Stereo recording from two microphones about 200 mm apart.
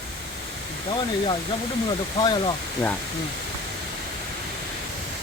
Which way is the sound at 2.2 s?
20° left (ahead or behind).